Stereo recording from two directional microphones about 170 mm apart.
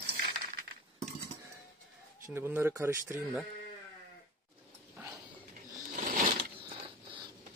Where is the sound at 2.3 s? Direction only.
15° right (ahead or behind).